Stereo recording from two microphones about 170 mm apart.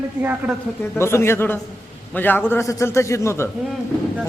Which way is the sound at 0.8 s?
15° left (ahead or behind).